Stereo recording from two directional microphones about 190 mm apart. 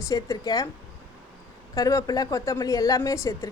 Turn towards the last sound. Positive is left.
turn(degrees=15)  # may be behind; listen again after turning